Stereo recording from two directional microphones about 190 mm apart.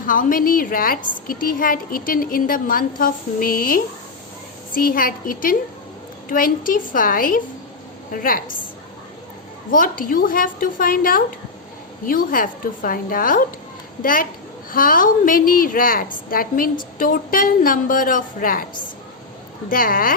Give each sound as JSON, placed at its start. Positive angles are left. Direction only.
{"t": 0.0, "sound": "a woman's voice", "side_deg": 45}
{"t": 9.7, "sound": "a woman's voice", "side_deg": 45}
{"t": 19.7, "sound": "a woman's voice", "side_deg": 50}